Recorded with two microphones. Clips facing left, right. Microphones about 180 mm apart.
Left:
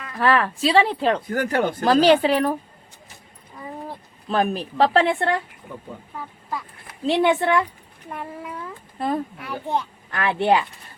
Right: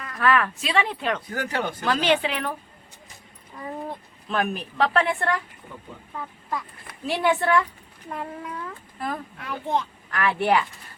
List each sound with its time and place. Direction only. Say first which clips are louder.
0.2 s speech: left 3 dB; 30° left (ahead or behind)
1.3 s speech: left 6 dB; 50° left (ahead or behind)
4.3 s speech: left 4 dB; 30° left (ahead or behind)
7.0 s a woman's voice: left 4 dB; 25° left (ahead or behind)
8.6 s speech: left 5 dB; 25° left (ahead or behind)
9.4 s speech: left 1 dB; 10° left (ahead or behind)
10.1 s a woman's voice: left 2 dB; 25° left (ahead or behind)